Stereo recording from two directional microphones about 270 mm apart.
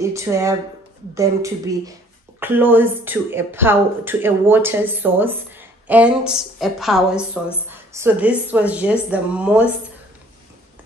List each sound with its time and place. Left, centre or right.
0.0 s a woman's voice: centre